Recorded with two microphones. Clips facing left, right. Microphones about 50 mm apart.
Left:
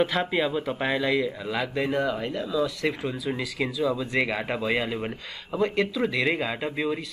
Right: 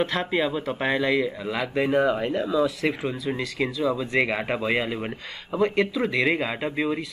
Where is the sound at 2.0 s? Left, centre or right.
Centre.